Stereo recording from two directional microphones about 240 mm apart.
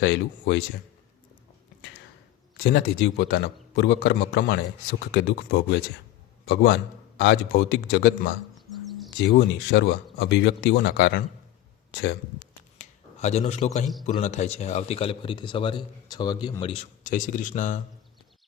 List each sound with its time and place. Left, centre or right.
0.0 s speech: left
2.6 s a man's voice: left
12.8 s a sound: left
14.1 s a man's voice: left